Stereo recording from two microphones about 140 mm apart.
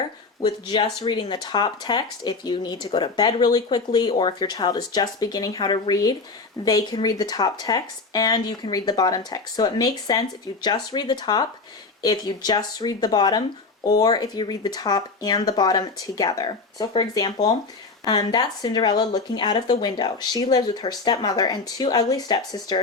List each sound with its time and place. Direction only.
0.4 s speech: 35° left (ahead or behind)